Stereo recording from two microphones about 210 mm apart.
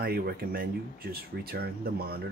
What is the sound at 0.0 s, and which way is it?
Speech, 45° right (ahead or behind).